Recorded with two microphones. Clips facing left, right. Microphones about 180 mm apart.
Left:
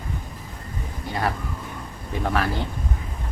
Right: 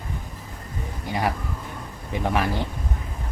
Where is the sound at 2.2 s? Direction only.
15° right (ahead or behind).